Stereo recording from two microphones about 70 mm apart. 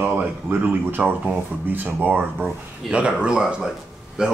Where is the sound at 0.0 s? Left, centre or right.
Right.